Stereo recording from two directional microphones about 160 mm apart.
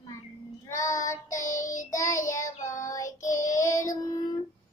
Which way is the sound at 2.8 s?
20° left (ahead or behind).